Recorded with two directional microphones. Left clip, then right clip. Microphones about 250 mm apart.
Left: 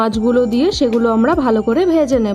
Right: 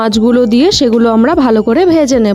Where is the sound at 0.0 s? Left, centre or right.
Right.